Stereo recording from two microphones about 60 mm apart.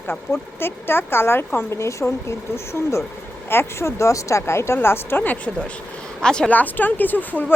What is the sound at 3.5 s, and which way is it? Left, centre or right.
A woman's voice, left.